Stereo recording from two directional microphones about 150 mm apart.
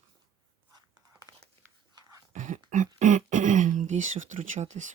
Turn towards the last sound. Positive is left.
turn(degrees=-55)  # may be behind; listen again after turning